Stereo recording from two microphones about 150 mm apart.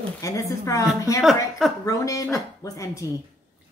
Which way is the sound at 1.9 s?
20° left (ahead or behind).